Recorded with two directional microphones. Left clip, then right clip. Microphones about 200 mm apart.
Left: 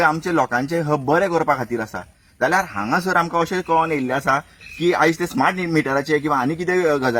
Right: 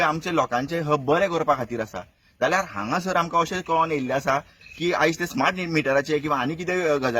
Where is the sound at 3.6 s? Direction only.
45° right (ahead or behind).